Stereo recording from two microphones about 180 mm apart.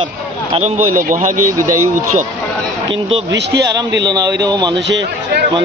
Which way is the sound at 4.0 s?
20° right (ahead or behind).